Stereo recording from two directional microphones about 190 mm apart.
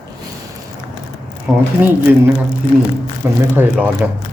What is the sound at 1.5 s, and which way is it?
Speech, 5° right (ahead or behind).